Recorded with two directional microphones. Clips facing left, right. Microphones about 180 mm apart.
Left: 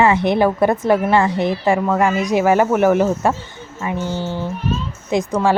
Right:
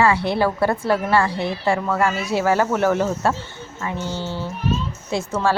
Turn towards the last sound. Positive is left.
turn(degrees=15)  # may be behind; listen again after turning